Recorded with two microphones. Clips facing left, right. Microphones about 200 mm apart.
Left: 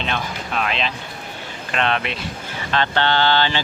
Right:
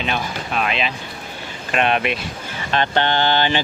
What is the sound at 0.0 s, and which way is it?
Speech, 5° right (ahead or behind).